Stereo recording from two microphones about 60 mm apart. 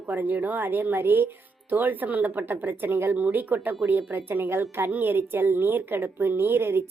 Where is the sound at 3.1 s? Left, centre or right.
Right.